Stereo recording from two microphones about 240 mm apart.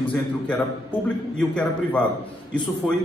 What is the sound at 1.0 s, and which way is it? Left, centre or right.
A man's voice, centre.